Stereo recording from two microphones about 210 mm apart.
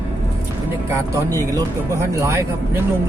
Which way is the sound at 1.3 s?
15° right (ahead or behind).